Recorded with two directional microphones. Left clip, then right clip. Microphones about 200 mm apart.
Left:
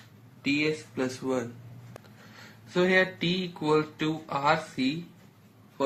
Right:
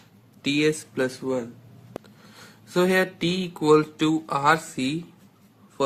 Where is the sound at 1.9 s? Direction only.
Centre (ahead or behind).